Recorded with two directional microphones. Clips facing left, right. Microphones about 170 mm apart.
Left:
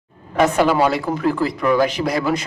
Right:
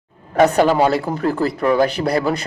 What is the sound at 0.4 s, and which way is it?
Speech, 40° right (ahead or behind).